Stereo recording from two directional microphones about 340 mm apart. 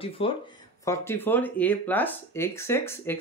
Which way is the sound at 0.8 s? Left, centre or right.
Centre.